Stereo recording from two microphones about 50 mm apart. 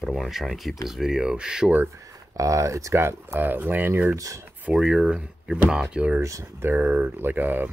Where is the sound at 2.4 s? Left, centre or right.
Right.